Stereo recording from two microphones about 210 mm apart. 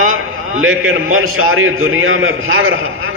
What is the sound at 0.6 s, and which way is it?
A man's voice, 75° right (ahead or behind).